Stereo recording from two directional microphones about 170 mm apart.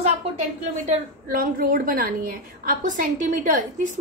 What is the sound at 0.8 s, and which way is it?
A woman's voice, 55° right (ahead or behind).